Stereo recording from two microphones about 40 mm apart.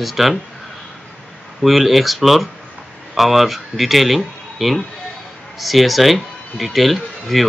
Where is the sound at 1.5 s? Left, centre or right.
Centre.